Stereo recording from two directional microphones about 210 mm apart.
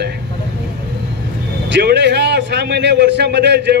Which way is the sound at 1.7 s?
55° right (ahead or behind).